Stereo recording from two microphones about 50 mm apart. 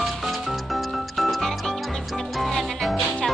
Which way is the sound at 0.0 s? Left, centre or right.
Centre.